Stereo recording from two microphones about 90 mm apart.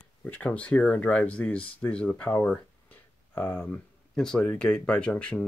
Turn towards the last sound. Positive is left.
turn(degrees=15)  # may be behind; listen again after turning